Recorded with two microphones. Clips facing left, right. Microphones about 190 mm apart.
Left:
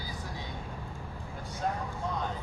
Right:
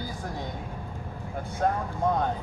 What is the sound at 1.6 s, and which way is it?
Speech, 55° right (ahead or behind).